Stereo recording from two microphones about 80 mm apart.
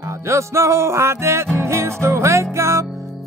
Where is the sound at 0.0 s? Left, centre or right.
Right.